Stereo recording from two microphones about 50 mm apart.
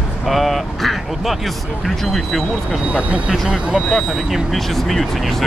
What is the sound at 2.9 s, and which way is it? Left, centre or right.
Speech, right.